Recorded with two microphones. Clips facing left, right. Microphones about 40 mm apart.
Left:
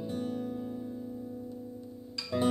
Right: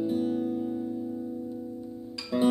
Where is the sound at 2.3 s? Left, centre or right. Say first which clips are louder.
Right 4 dB; centre.